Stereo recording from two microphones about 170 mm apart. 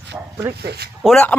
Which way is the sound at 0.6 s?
70° right (ahead or behind).